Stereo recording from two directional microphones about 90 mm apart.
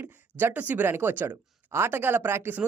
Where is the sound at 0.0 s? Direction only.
20° right (ahead or behind).